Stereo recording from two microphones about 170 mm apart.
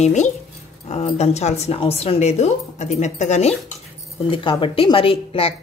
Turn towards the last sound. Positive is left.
turn(degrees=35)  # may be behind; listen again after turning